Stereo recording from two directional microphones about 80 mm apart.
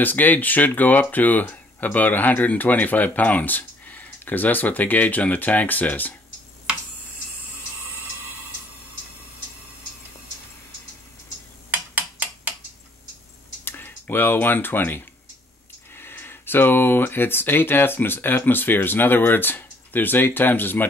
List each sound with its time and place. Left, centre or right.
0.0 s speech: left
11.7 s mechanisms: centre
13.7 s speech: left